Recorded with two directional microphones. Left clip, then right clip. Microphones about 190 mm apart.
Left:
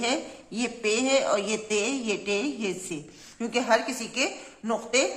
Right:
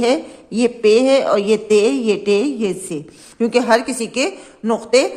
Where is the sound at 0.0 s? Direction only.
40° right (ahead or behind).